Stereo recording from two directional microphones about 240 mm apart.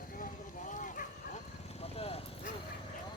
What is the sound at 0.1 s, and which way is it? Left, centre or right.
Dog, left.